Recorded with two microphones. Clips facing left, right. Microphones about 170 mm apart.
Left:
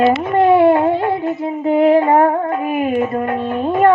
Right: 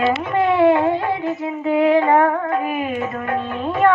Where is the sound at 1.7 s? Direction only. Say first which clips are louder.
Left 3 dB; 40° left (ahead or behind).